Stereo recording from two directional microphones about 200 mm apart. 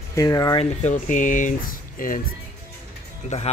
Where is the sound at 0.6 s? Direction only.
35° left (ahead or behind).